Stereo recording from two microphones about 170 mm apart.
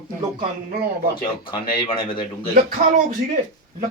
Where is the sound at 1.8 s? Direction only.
30° left (ahead or behind).